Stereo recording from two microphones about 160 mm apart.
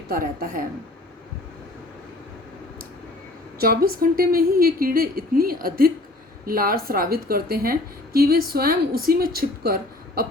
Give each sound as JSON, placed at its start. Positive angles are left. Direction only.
{"t": 0.1, "sound": "a woman's voice", "side_deg": -65}
{"t": 3.6, "sound": "a woman's voice", "side_deg": -70}